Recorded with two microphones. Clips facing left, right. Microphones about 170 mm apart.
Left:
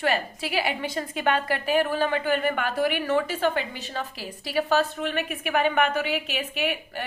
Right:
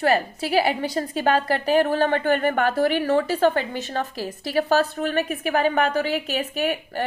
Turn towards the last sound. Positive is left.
turn(degrees=-40)  # may be behind; listen again after turning